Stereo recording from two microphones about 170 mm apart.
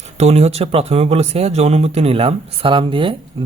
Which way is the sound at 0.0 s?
40° right (ahead or behind).